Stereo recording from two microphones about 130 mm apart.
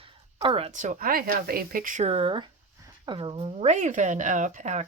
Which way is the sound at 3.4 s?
55° right (ahead or behind).